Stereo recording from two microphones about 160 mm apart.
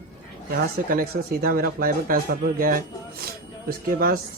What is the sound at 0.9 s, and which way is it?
Speech, 65° right (ahead or behind).